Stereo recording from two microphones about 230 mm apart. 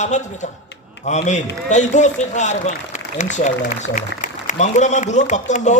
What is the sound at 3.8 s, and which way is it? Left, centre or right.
A man's voice, left.